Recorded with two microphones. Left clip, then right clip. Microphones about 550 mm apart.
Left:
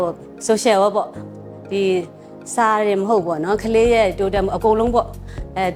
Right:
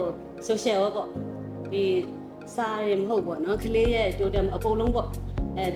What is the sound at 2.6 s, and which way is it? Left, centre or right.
A woman's voice, left.